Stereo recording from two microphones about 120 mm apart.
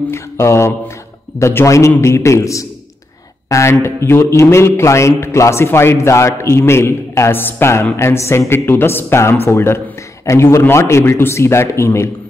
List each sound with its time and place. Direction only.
0.1 s a man's voice: 25° left (ahead or behind)